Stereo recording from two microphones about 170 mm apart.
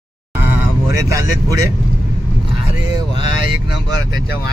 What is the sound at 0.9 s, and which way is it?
Speech, 15° right (ahead or behind).